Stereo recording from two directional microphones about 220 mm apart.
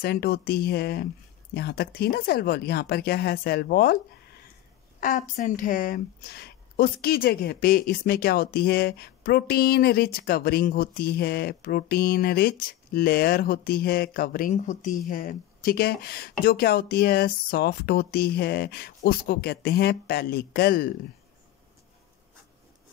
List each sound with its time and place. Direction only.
0.0 s a woman's voice: 45° left (ahead or behind)
5.0 s a woman's voice: 35° left (ahead or behind)